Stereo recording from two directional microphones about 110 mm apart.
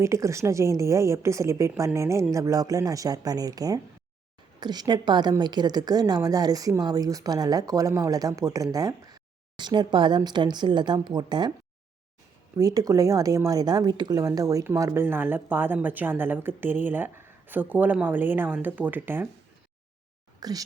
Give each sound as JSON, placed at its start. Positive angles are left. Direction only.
{"t": 0.0, "sound": "speech", "side_deg": -25}
{"t": 12.5, "sound": "speech", "side_deg": -35}
{"t": 20.4, "sound": "speech", "side_deg": -35}